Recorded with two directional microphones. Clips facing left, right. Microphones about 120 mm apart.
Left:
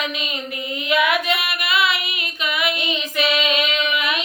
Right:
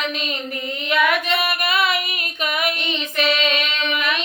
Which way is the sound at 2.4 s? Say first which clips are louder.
Even; 45° right (ahead or behind).